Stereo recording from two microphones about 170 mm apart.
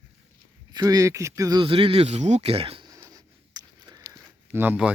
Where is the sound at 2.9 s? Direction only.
20° right (ahead or behind).